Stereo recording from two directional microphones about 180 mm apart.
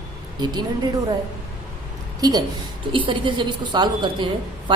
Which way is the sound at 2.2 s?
20° right (ahead or behind).